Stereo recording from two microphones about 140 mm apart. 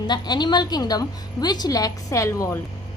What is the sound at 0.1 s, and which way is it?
A woman's voice, 30° left (ahead or behind).